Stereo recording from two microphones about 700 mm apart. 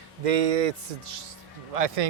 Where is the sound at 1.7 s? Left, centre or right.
Right.